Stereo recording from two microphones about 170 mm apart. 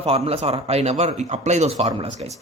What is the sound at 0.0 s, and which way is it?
Speech, 35° right (ahead or behind).